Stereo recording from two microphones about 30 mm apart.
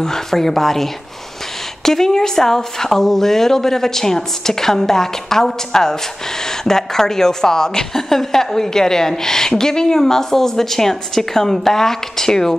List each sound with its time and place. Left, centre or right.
0.0 s a woman's voice: centre
1.9 s a woman's voice: centre